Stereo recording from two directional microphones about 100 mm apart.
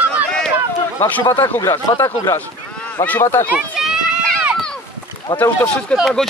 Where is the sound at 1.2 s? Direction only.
50° left (ahead or behind).